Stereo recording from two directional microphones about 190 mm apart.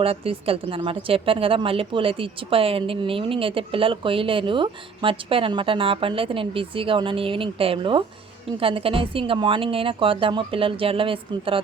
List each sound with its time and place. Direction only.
0.0 s a woman's voice: 30° right (ahead or behind)